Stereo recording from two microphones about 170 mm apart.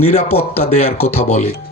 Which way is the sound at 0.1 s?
40° left (ahead or behind).